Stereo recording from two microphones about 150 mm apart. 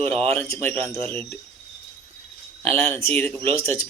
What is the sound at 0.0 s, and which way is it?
Speech, 40° right (ahead or behind).